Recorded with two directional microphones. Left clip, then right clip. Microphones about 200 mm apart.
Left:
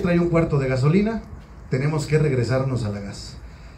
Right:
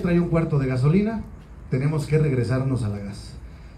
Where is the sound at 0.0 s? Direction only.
20° left (ahead or behind).